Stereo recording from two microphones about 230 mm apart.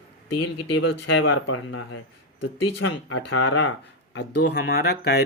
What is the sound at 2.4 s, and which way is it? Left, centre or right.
Speech, left.